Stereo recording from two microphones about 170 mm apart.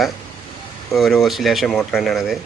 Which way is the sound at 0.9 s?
Centre (ahead or behind).